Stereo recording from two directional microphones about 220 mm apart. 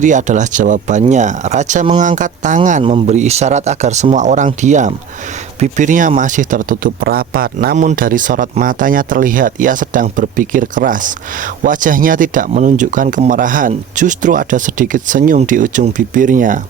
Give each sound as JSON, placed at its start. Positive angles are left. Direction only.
{"t": 0.0, "sound": "speech", "side_deg": -35}